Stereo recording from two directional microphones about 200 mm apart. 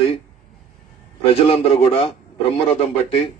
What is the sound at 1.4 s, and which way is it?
Speech, 30° left (ahead or behind).